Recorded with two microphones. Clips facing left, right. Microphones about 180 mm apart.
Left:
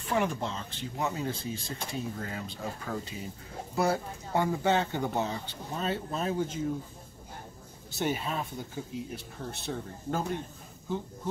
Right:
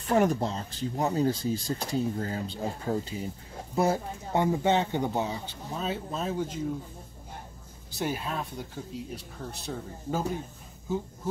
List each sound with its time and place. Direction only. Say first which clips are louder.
0.1 s speech: right 5 dB; 40° right (ahead or behind); by 5.4 s 15° right (ahead or behind)
5.8 s speech: even; centre (ahead or behind)
8.0 s speech: even; centre (ahead or behind)